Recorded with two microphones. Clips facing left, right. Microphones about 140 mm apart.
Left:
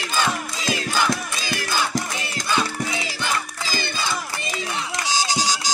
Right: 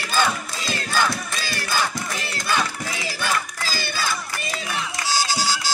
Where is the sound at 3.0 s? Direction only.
20° left (ahead or behind).